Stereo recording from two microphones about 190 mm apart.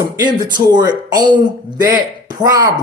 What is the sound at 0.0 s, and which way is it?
A man's voice, 20° right (ahead or behind).